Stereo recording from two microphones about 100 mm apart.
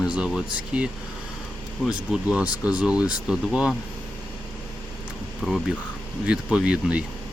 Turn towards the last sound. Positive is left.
turn(degrees=-10)  # may be behind; listen again after turning